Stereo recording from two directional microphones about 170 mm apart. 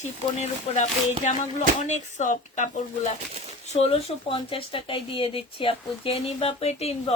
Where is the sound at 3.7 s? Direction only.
35° left (ahead or behind).